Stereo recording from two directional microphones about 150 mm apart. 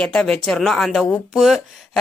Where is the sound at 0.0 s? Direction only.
5° left (ahead or behind).